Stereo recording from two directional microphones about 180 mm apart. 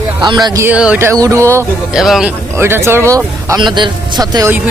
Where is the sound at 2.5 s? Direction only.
15° right (ahead or behind).